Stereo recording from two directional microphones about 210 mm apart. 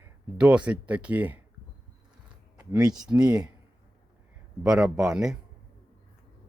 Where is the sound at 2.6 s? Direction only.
15° right (ahead or behind).